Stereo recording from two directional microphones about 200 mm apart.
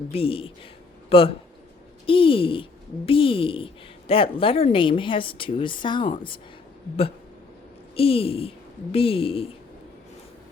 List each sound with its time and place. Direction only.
0.1 s a woman's voice: 30° left (ahead or behind)
7.9 s a woman's voice: 30° left (ahead or behind)